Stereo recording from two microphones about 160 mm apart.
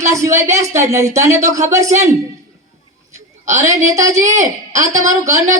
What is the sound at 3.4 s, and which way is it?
A man's voice, 20° right (ahead or behind).